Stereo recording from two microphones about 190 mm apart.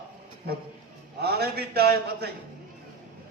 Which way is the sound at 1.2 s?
55° right (ahead or behind).